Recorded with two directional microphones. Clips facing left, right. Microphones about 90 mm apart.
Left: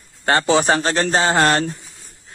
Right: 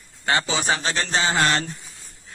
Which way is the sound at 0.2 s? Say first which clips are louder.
Left 7 dB; 45° left (ahead or behind).